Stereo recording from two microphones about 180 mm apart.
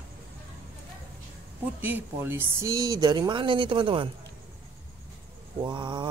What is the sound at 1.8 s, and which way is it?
Speech, 10° right (ahead or behind).